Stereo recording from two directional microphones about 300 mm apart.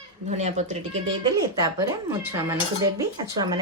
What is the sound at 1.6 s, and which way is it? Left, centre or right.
Cutlery, centre.